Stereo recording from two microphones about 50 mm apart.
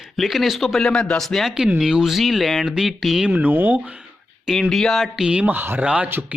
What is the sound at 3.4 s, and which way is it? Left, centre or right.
Speech, right.